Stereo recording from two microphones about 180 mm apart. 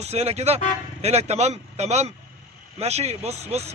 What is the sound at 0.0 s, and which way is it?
Speech, 35° right (ahead or behind).